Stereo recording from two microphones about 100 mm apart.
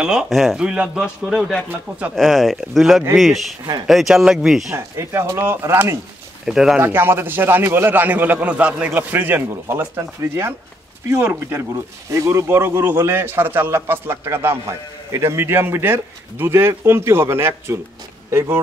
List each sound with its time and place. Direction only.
0.0 s speech: 5° right (ahead or behind)
2.1 s speech: centre (ahead or behind)
4.7 s a man's voice: 25° right (ahead or behind)
6.4 s speech: 5° right (ahead or behind)
6.8 s a man's voice: 25° right (ahead or behind)